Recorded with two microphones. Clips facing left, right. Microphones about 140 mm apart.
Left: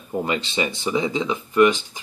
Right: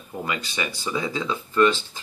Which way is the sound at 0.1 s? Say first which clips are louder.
Left 6 dB; 25° left (ahead or behind).